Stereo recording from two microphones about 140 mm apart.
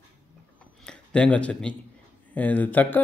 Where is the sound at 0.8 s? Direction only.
5° left (ahead or behind).